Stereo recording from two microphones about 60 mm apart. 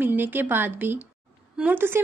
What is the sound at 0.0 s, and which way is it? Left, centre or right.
A woman's voice, right.